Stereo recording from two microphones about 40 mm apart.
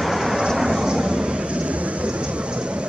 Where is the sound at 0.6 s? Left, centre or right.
Centre.